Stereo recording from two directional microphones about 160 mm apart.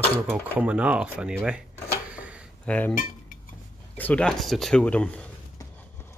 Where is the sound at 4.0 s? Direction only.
5° left (ahead or behind).